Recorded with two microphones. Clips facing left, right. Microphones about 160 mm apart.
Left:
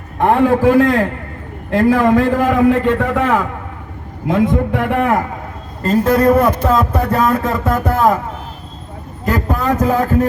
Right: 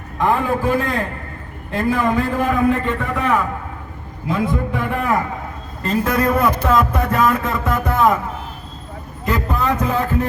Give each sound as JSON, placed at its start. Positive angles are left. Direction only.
{"t": 0.2, "sound": "a man's voice", "side_deg": 70}
{"t": 4.5, "sound": "a man's voice", "side_deg": 85}
{"t": 5.8, "sound": "a man's voice", "side_deg": 40}
{"t": 9.2, "sound": "speech", "side_deg": 40}